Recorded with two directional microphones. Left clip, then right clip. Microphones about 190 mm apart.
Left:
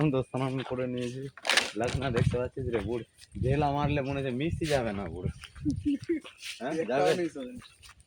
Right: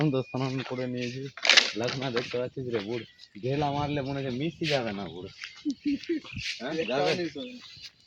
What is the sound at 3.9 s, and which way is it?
Speech, 20° right (ahead or behind).